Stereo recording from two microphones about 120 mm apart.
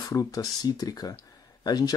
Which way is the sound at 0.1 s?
30° left (ahead or behind).